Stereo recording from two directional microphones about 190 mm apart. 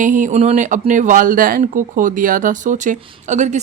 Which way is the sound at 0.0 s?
40° right (ahead or behind).